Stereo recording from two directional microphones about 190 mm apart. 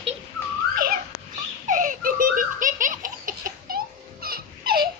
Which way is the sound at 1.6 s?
45° right (ahead or behind).